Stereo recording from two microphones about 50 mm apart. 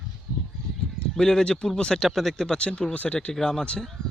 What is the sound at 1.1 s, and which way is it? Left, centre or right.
Speech, centre.